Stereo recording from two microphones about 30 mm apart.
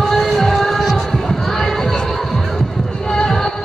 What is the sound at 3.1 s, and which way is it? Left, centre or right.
Music, left.